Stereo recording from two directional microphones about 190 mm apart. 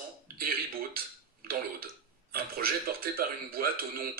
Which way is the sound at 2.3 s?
50° right (ahead or behind).